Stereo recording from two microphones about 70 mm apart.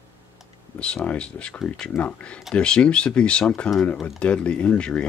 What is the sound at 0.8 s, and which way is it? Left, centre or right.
Speech, centre.